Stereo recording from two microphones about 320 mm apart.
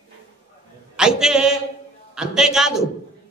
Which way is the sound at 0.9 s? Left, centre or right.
Centre.